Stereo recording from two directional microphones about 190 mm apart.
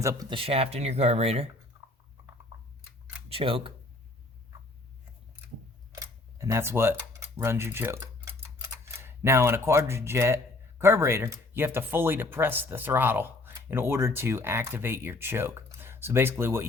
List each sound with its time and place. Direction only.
0.0 s speech: 20° right (ahead or behind)
3.2 s speech: 30° right (ahead or behind)
5.9 s camera: 15° right (ahead or behind)
7.3 s speech: 15° right (ahead or behind)